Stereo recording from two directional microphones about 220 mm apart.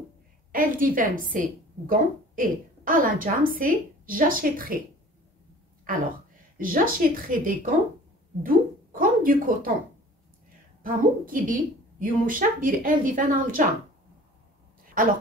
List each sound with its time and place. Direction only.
0.5 s a woman's voice: 40° right (ahead or behind)
6.6 s a woman's voice: 40° right (ahead or behind)
10.8 s a woman's voice: 40° right (ahead or behind)
15.0 s a woman's voice: 40° right (ahead or behind)